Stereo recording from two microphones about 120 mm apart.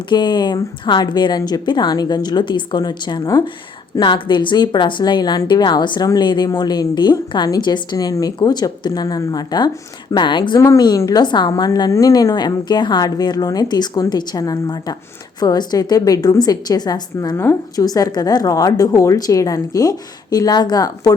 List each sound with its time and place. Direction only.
0.1 s a woman's voice: 40° left (ahead or behind)
10.6 s a woman's voice: 25° left (ahead or behind)